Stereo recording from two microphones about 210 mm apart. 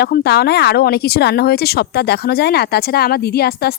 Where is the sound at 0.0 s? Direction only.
50° left (ahead or behind).